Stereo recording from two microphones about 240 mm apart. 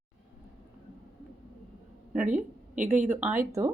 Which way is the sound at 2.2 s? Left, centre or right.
Right.